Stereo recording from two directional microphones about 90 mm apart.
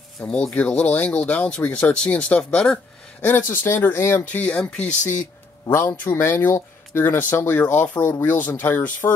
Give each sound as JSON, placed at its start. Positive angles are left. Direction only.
{"t": 0.2, "sound": "speech", "side_deg": 10}
{"t": 3.2, "sound": "speech", "side_deg": 20}
{"t": 4.3, "sound": "speech", "side_deg": 15}
{"t": 5.7, "sound": "speech", "side_deg": 25}